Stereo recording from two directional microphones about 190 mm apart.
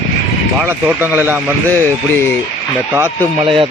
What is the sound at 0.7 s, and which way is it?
Speech, 10° right (ahead or behind).